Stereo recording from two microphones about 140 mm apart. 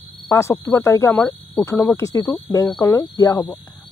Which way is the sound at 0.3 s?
20° left (ahead or behind).